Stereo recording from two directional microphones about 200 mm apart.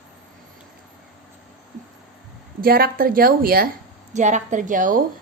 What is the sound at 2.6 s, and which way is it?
A woman's voice, 50° right (ahead or behind).